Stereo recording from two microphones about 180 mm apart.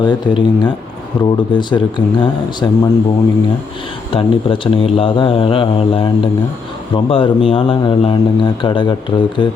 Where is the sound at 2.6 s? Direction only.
15° left (ahead or behind).